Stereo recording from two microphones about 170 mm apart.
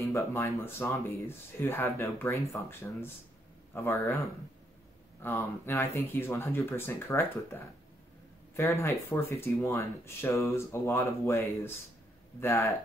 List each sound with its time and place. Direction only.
0.1 s speech: 15° left (ahead or behind)
5.2 s speech: 15° left (ahead or behind)